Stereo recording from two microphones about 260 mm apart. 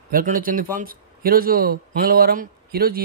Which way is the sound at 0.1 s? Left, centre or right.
Right.